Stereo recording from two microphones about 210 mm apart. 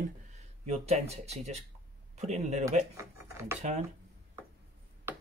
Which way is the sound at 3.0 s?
10° right (ahead or behind).